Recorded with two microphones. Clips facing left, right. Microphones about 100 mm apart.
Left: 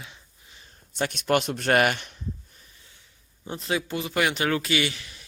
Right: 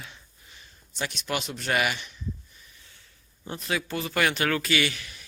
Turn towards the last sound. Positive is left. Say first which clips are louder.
# even
turn(degrees=25)  # may be behind; listen again after turning